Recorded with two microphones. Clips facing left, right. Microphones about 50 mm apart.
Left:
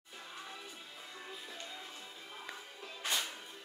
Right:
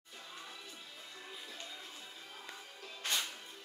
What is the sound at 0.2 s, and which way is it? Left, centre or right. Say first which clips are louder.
Music: left 2 dB; centre.